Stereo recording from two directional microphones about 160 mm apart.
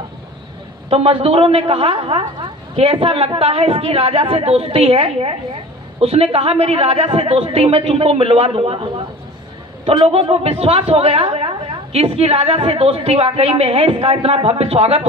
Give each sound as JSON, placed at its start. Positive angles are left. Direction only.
{"t": 0.8, "sound": "a woman's voice", "side_deg": -40}